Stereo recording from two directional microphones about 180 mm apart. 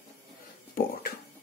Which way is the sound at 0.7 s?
55° left (ahead or behind).